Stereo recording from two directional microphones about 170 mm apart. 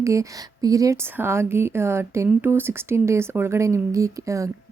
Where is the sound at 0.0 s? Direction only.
20° right (ahead or behind).